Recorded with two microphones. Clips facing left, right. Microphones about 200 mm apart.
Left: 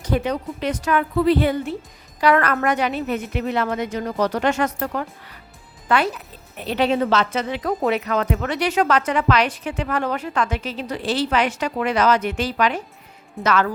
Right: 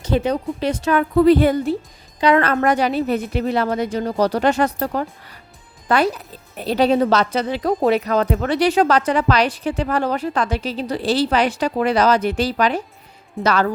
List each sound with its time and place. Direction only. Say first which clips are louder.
0.0 s speech: right 3 dB; 30° right (ahead or behind)
0.9 s a woman's voice: right 5 dB; 45° right (ahead or behind)
2.2 s speech: right 2 dB; 25° right (ahead or behind)